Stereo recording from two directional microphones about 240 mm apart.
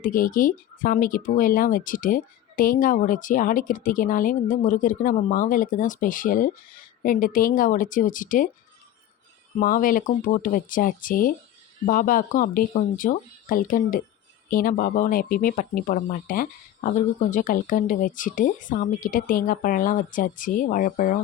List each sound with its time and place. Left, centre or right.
0.0 s speech: left
9.6 s speech: left